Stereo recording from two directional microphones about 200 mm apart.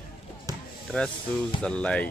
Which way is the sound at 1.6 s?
5° left (ahead or behind).